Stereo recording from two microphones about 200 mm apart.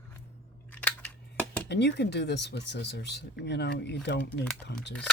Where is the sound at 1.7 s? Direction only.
60° left (ahead or behind).